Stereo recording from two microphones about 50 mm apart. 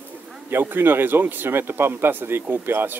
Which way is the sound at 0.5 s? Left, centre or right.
Right.